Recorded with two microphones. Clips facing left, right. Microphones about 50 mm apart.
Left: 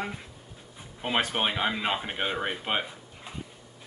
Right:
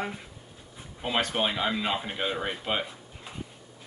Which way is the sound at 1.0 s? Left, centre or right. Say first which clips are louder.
Even; centre.